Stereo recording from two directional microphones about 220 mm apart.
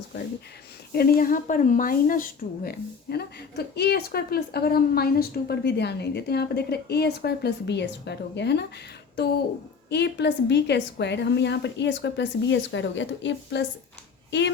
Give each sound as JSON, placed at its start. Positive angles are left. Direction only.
{"t": 0.9, "sound": "a woman's voice", "side_deg": 40}
{"t": 9.9, "sound": "a woman's voice", "side_deg": 50}